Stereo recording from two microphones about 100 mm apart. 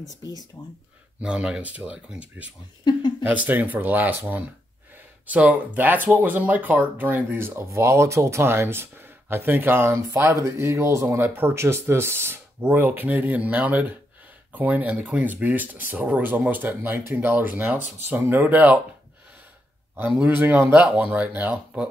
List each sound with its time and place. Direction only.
0.2 s speech: 40° left (ahead or behind)
1.2 s speech: 10° right (ahead or behind)
2.8 s a sound: 45° left (ahead or behind)
3.3 s speech: 15° right (ahead or behind)
20.2 s speech: 15° right (ahead or behind)